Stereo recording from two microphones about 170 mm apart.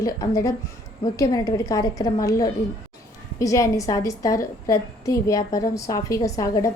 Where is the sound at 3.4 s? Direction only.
20° left (ahead or behind).